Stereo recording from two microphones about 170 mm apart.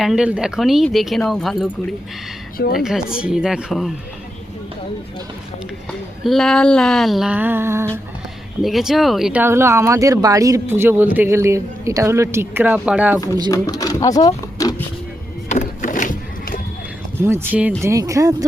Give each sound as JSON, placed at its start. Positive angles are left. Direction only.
{"t": 0.0, "sound": "speech", "side_deg": -5}
{"t": 2.7, "sound": "speech", "side_deg": -5}
{"t": 6.2, "sound": "speech", "side_deg": 0}
{"t": 8.6, "sound": "speech", "side_deg": 0}
{"t": 13.5, "sound": "speech", "side_deg": 20}
{"t": 15.4, "sound": "a sound", "side_deg": 45}
{"t": 17.2, "sound": "speech", "side_deg": -10}